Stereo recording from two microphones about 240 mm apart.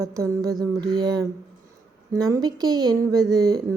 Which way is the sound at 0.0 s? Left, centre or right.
Centre.